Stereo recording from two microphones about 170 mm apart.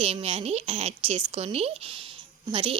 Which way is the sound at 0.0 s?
35° right (ahead or behind).